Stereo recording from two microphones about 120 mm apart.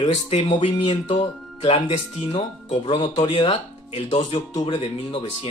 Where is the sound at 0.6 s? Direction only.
55° left (ahead or behind).